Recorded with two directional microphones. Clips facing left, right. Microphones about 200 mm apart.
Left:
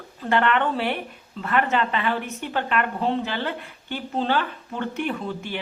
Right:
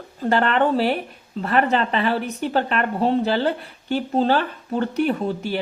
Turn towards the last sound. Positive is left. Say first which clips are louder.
# right 6 dB
turn(degrees=-40)  # may be behind; listen again after turning